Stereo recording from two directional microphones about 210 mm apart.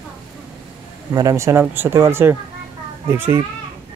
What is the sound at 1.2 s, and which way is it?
Speech, 15° right (ahead or behind).